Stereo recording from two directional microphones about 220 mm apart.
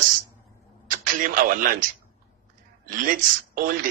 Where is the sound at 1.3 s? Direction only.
40° right (ahead or behind).